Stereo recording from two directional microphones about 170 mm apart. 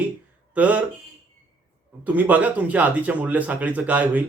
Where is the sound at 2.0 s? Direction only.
10° right (ahead or behind).